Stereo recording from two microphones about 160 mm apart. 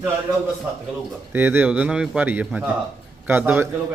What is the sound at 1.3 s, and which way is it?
Speech, 15° right (ahead or behind).